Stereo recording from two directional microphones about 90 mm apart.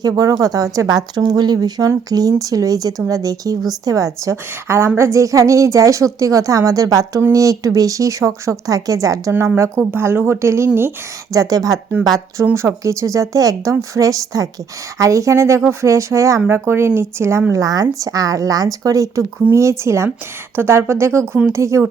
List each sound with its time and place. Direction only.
0.0 s speech: 40° right (ahead or behind)
11.3 s speech: 40° right (ahead or behind)
17.5 s speech: 40° right (ahead or behind)